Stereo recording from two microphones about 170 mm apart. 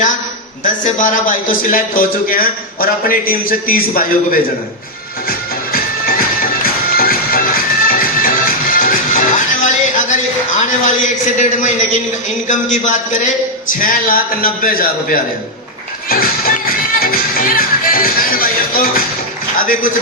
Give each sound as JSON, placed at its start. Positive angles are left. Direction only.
{"t": 0.6, "sound": "a man's voice", "side_deg": 50}
{"t": 5.3, "sound": "music", "side_deg": 55}
{"t": 10.6, "sound": "a man's voice", "side_deg": 45}
{"t": 16.0, "sound": "music", "side_deg": 60}
{"t": 19.5, "sound": "a sound", "side_deg": 55}